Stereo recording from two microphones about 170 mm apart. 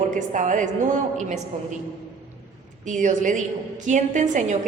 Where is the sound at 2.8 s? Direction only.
45° right (ahead or behind).